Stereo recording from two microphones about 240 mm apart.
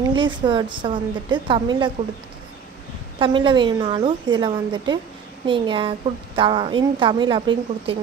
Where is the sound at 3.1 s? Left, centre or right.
Right.